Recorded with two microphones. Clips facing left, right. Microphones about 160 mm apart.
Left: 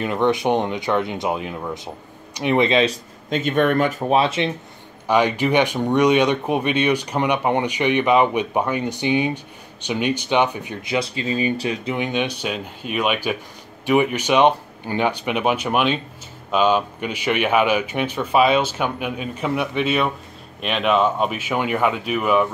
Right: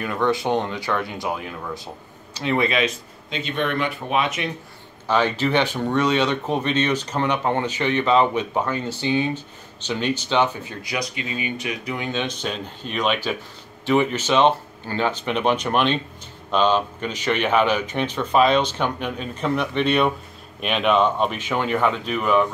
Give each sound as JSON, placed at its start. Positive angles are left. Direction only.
{"t": 0.0, "sound": "speech", "side_deg": 20}
{"t": 3.3, "sound": "speech", "side_deg": 50}
{"t": 5.0, "sound": "speech", "side_deg": 15}